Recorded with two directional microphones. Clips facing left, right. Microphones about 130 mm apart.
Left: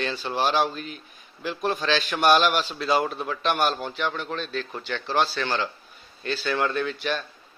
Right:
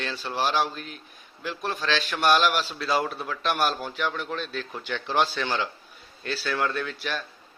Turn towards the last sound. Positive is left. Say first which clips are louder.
# left 4 dB
turn(degrees=0)  # may be behind; listen again after turning